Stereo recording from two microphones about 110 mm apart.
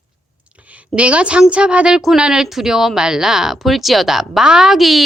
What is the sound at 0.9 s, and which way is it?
A woman's voice, 10° right (ahead or behind).